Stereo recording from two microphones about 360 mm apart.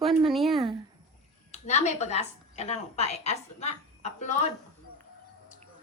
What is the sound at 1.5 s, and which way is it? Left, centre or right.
A woman's voice, centre.